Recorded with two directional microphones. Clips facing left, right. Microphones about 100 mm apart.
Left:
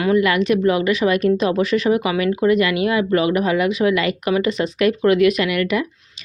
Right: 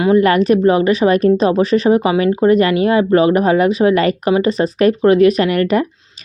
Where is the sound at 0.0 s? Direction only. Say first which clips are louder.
Right 5 dB; 35° right (ahead or behind).